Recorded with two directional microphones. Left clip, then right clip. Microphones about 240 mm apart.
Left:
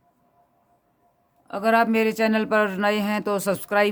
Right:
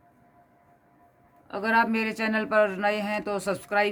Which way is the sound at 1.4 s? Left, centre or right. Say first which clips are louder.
Left 4 dB; left.